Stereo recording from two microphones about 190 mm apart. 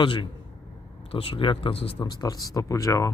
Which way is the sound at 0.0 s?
25° left (ahead or behind).